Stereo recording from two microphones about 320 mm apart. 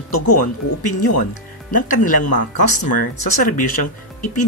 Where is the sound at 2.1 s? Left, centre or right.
Left.